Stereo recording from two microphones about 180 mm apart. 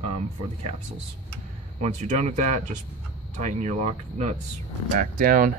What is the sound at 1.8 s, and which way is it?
Speech, 40° right (ahead or behind).